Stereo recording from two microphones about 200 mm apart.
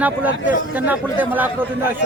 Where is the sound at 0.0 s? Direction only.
10° right (ahead or behind).